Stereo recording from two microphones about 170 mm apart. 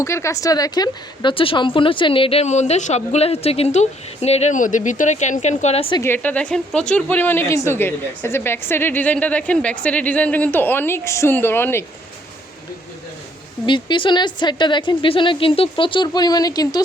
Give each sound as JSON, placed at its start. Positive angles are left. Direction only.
{"t": 0.0, "sound": "a woman's voice", "side_deg": 15}
{"t": 6.0, "sound": "a woman's voice", "side_deg": 10}
{"t": 13.7, "sound": "speech", "side_deg": 25}